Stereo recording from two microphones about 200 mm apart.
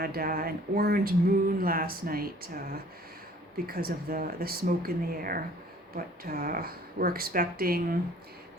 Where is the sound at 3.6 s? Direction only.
50° right (ahead or behind).